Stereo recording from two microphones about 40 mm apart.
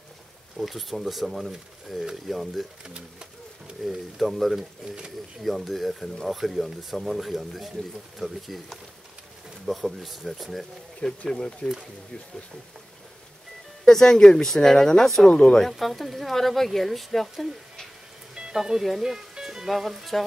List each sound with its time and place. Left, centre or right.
0.6 s speech: centre
2.8 s speech: right
3.8 s speech: centre
9.7 s speech: centre
11.1 s speech: centre
13.8 s speech: centre
15.7 s speech: centre
18.3 s a sound: centre
18.6 s speech: centre
19.1 s music: centre
19.7 s speech: centre